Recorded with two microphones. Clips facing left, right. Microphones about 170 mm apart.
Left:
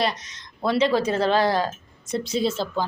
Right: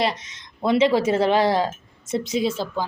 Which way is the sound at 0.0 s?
25° right (ahead or behind).